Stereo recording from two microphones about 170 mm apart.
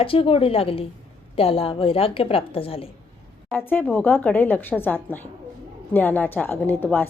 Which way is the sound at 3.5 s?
10° left (ahead or behind).